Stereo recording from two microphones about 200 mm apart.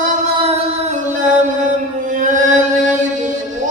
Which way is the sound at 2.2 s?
40° right (ahead or behind).